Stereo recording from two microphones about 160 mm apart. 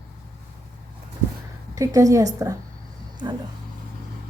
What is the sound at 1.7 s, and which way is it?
Speech, 20° right (ahead or behind).